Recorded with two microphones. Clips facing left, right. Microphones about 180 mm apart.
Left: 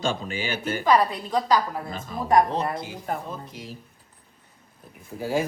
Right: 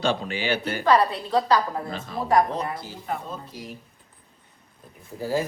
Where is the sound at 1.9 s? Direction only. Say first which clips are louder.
Right 2 dB; 45° left (ahead or behind).